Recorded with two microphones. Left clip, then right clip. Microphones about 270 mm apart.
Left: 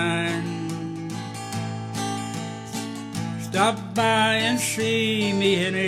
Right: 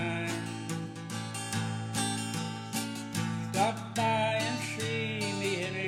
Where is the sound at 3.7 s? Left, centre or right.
Left.